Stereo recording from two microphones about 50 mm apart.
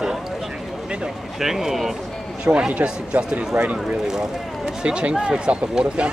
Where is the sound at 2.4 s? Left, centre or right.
Centre.